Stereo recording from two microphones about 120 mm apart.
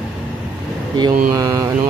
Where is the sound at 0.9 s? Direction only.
35° right (ahead or behind).